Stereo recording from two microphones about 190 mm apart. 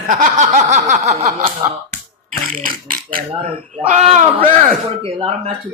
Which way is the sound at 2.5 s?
50° right (ahead or behind).